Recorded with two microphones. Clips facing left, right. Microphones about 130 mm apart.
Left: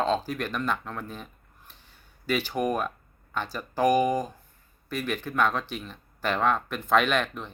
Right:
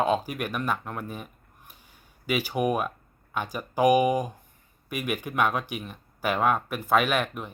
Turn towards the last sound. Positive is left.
turn(degrees=-10)  # may be behind; listen again after turning